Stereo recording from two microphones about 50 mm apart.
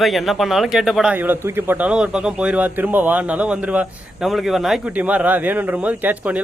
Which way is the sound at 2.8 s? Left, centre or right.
Right.